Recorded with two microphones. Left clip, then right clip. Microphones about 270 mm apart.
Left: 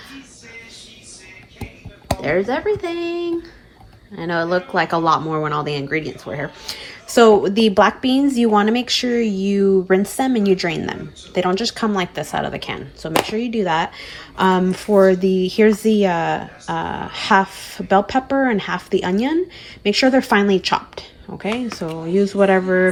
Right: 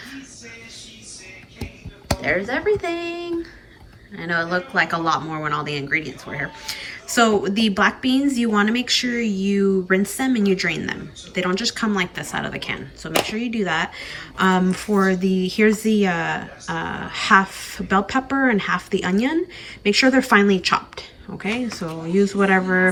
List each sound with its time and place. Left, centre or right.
2.2 s speech: centre